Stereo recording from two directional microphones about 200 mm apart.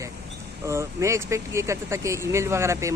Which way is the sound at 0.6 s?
15° right (ahead or behind).